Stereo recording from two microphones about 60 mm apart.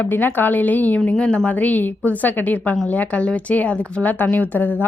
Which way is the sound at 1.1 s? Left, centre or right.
Centre.